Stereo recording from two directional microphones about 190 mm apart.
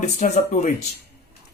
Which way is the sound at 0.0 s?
35° left (ahead or behind).